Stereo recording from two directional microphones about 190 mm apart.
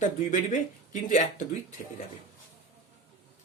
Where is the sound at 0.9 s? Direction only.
40° left (ahead or behind).